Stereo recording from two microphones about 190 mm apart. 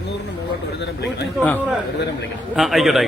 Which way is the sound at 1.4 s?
10° left (ahead or behind).